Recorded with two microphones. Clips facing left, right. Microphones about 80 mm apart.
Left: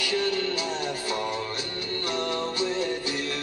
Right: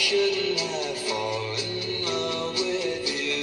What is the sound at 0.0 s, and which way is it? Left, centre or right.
Music, left.